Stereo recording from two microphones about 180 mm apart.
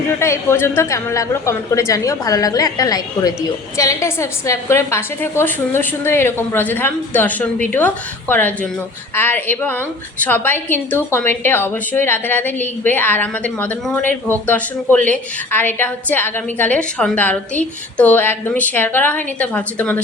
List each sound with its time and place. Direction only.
0.2 s a woman's voice: 15° left (ahead or behind)